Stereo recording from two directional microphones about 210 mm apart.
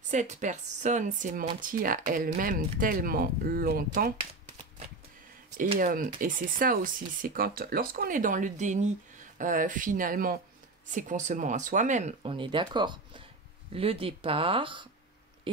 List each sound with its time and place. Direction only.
0.1 s speech: 35° right (ahead or behind)
5.6 s speech: 40° right (ahead or behind)
15.5 s a sound: 25° right (ahead or behind)